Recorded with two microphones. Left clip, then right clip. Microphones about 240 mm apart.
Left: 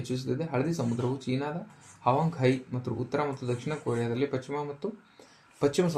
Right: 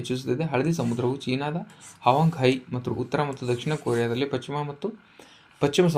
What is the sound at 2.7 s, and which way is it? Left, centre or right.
Speech, right.